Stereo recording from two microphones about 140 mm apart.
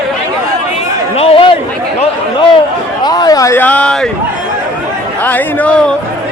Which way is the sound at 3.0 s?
30° left (ahead or behind).